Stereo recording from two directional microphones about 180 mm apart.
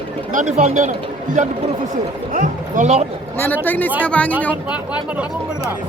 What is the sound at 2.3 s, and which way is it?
Speech, 45° right (ahead or behind).